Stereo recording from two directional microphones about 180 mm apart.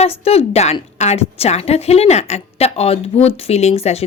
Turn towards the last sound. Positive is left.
turn(degrees=35)  # may be behind; listen again after turning